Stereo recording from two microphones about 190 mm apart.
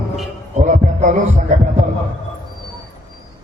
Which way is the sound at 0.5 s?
40° right (ahead or behind).